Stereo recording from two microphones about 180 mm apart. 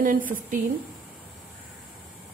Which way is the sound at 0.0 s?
50° right (ahead or behind).